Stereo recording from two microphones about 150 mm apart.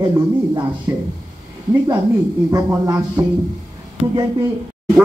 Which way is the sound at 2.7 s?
25° right (ahead or behind).